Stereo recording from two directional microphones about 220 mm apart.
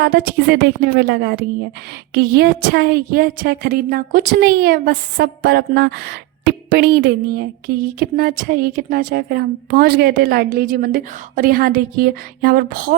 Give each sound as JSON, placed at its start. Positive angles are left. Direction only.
{"t": 0.0, "sound": "a woman's voice", "side_deg": -45}